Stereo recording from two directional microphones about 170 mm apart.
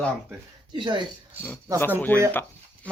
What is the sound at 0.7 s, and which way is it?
Speech, 25° right (ahead or behind).